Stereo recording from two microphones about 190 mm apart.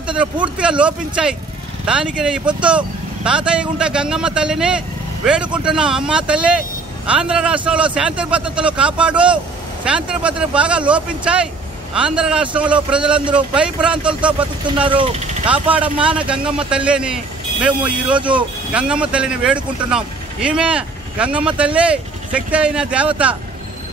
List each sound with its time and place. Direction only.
0.0 s speech: 5° right (ahead or behind)
14.8 s speech: 25° right (ahead or behind)
15.7 s speech: 5° right (ahead or behind)